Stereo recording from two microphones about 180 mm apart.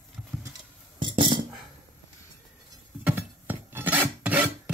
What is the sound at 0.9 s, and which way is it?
Cutlery, 25° right (ahead or behind).